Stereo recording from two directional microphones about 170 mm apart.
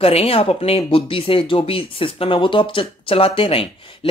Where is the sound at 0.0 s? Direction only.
35° left (ahead or behind).